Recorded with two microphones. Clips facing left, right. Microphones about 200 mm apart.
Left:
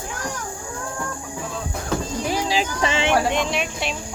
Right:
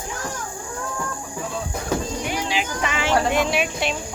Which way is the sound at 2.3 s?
35° left (ahead or behind).